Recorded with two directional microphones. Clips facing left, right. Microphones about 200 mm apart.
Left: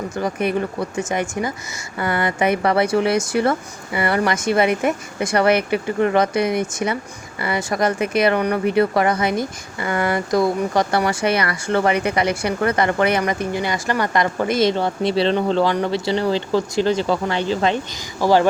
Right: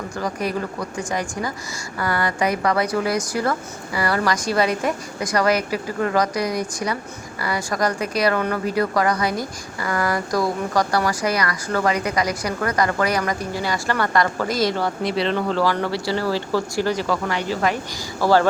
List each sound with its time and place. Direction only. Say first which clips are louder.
0.2 s speech: left 4 dB; 25° left (ahead or behind)